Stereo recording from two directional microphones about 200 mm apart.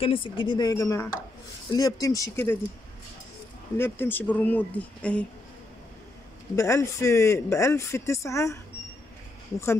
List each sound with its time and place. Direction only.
0.0 s speech: 25° left (ahead or behind)
3.7 s speech: 10° left (ahead or behind)
6.5 s speech: 15° left (ahead or behind)